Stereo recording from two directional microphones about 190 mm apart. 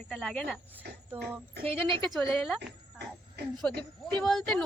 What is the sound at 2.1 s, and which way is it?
Speech, centre (ahead or behind).